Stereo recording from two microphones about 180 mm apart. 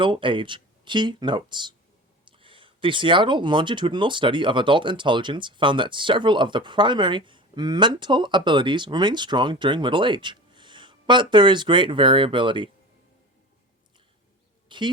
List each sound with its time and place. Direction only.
0.0 s speech: 30° right (ahead or behind)
14.7 s speech: 25° right (ahead or behind)